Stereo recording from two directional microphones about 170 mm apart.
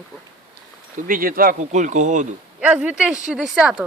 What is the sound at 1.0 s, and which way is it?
Speech, 55° right (ahead or behind).